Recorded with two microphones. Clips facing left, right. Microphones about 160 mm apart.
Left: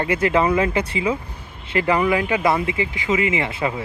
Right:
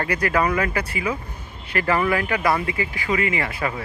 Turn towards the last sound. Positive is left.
turn(degrees=20)  # may be behind; listen again after turning